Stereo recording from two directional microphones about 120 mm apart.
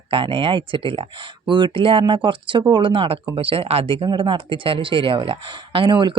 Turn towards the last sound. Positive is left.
turn(degrees=-40)  # may be behind; listen again after turning